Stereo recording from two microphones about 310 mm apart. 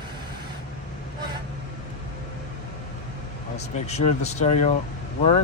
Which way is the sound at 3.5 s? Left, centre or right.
Left.